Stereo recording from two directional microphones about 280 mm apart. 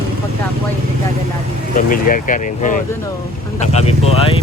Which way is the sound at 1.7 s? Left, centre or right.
Left.